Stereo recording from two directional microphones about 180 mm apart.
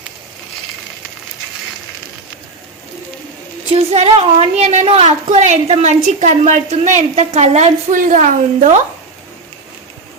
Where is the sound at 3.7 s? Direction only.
35° right (ahead or behind).